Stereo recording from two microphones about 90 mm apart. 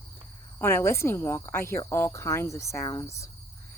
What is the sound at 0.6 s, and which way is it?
Speech, 30° left (ahead or behind).